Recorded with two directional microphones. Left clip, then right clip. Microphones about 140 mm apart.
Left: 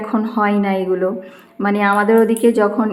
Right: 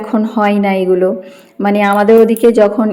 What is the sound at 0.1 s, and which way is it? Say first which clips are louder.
Speech: right 5 dB; 25° right (ahead or behind).